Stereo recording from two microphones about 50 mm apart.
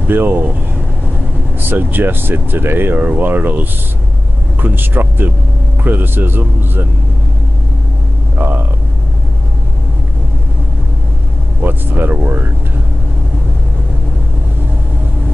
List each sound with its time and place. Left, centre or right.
0.1 s speech: right
1.6 s speech: right
11.6 s speech: right